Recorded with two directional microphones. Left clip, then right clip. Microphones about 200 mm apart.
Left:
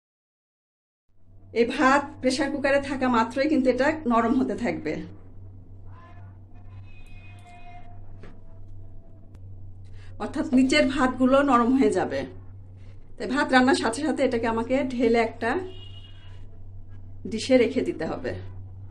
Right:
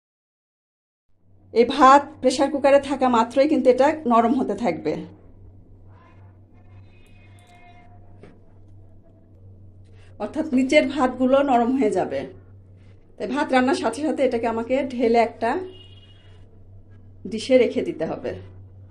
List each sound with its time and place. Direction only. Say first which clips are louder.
1.5 s a woman's voice: right 7 dB; 30° right (ahead or behind)
10.2 s a woman's voice: even; 5° right (ahead or behind)
17.2 s a woman's voice: right 3 dB; 10° right (ahead or behind)